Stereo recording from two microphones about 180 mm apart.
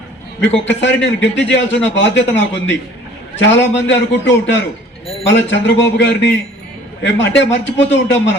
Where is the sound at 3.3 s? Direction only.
85° left.